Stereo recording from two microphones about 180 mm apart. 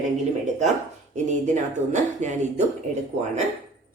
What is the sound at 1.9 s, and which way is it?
Speech, 40° right (ahead or behind).